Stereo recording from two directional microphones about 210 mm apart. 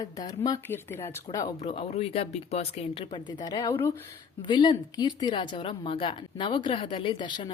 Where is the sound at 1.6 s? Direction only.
30° left (ahead or behind).